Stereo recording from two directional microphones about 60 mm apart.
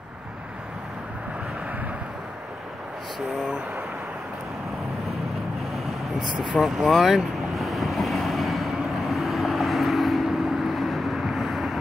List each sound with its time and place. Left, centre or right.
6.1 s speech: centre
6.6 s vehicle: centre